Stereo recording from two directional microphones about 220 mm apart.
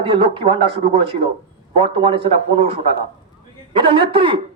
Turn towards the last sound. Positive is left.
turn(degrees=-25)  # may be behind; listen again after turning